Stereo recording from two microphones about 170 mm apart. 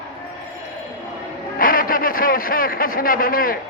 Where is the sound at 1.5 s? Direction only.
60° left (ahead or behind).